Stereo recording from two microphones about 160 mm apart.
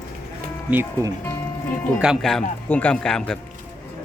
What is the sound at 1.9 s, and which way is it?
Speech, 5° right (ahead or behind).